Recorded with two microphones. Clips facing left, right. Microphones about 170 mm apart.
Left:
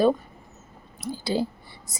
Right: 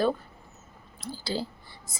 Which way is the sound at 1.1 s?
20° left (ahead or behind).